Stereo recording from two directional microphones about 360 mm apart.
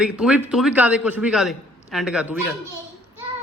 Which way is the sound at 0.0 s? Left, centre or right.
Centre.